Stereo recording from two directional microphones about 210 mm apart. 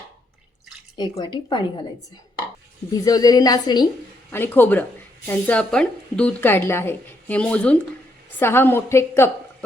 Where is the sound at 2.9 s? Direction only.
15° left (ahead or behind).